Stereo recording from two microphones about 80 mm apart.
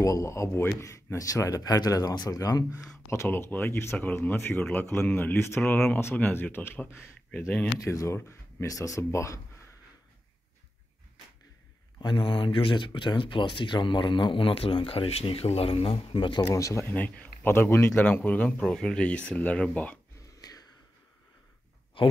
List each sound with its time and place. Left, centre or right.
0.0 s speech: left
3.1 s speech: left
6.1 s speech: left
7.8 s speech: left
12.0 s speech: left
16.5 s speech: left
16.8 s speech: left
17.5 s speech: left
18.2 s speech: centre
18.6 s speech: centre
20.3 s a sound: left
22.0 s speech: left